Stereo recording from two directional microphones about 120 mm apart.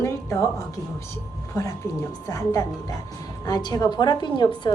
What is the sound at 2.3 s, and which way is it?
A woman's voice, 25° left (ahead or behind).